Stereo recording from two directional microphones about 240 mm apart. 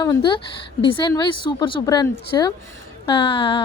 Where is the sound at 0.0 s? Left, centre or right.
Centre.